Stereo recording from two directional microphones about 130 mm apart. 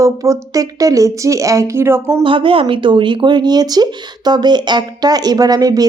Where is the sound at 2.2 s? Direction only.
40° right (ahead or behind).